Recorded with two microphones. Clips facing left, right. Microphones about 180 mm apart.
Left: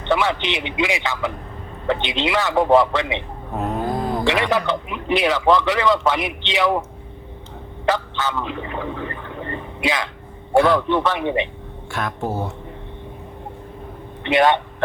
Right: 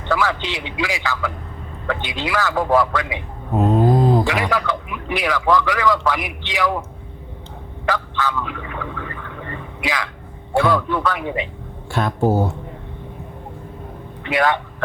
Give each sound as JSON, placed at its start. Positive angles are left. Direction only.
{"t": 0.0, "sound": "a man's voice", "side_deg": 25}
{"t": 3.5, "sound": "a sound", "side_deg": -20}
{"t": 4.3, "sound": "a man's voice", "side_deg": 25}
{"t": 7.9, "sound": "fowl", "side_deg": 25}
{"t": 10.7, "sound": "a man's voice", "side_deg": 25}
{"t": 11.9, "sound": "speech", "side_deg": -30}
{"t": 14.3, "sound": "a man's voice", "side_deg": 25}